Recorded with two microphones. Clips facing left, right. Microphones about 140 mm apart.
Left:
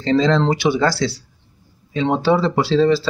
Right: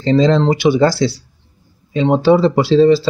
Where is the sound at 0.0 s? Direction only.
15° right (ahead or behind).